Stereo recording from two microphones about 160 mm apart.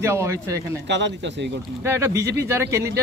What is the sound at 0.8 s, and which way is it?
Speech, 90° right.